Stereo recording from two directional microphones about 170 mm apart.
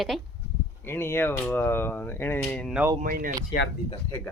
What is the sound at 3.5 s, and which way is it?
Speech, 35° left (ahead or behind).